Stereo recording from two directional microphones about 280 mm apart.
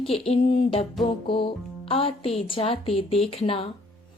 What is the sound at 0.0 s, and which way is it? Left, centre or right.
Speech, centre.